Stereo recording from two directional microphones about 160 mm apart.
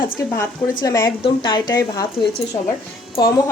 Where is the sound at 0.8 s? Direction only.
25° left (ahead or behind).